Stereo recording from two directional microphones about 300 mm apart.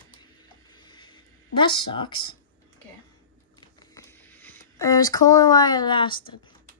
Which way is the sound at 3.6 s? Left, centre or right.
Centre.